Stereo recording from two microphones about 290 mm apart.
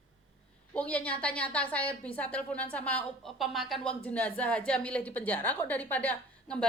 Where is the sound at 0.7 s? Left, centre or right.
Centre.